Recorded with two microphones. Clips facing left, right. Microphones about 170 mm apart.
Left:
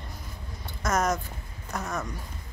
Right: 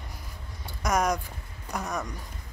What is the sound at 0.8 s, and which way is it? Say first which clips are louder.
Speech: even; 15° right (ahead or behind).